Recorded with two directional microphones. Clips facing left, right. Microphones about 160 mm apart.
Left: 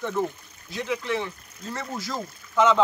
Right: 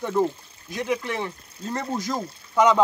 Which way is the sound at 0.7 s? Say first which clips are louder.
Right 1 dB; 50° right (ahead or behind).